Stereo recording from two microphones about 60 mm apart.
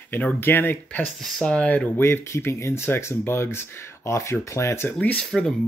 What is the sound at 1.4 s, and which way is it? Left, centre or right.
Speech, left.